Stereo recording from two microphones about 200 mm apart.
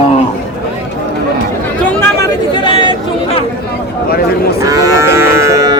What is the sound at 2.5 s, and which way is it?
Chatter, 25° left (ahead or behind).